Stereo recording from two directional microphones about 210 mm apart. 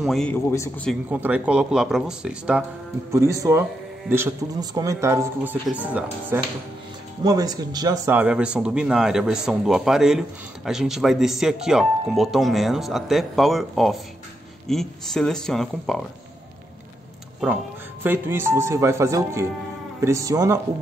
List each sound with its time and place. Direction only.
0.0 s speech: centre (ahead or behind)
1.1 s speech: 5° right (ahead or behind)
7.2 s speech: 20° right (ahead or behind); by 16.0 s centre (ahead or behind)
18.0 s speech: 10° right (ahead or behind)